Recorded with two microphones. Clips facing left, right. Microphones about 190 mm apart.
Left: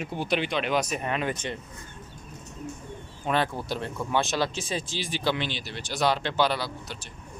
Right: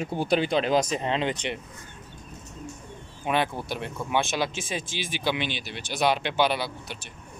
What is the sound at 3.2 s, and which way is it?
Speech, 15° right (ahead or behind).